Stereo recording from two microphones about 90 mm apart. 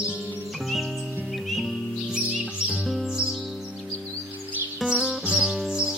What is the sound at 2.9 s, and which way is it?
Music, centre (ahead or behind).